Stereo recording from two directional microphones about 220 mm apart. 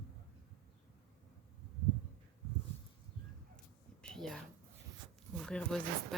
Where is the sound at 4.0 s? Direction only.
Centre (ahead or behind).